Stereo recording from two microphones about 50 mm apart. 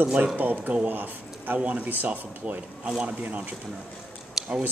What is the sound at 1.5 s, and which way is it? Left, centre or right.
Speech, right.